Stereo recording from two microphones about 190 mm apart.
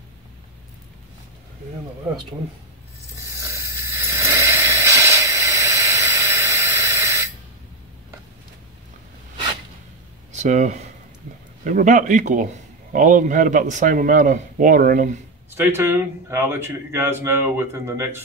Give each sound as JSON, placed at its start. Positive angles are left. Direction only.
{"t": 3.2, "sound": "mechanisms", "side_deg": -15}
{"t": 10.3, "sound": "speech", "side_deg": -40}
{"t": 15.5, "sound": "speech", "side_deg": -10}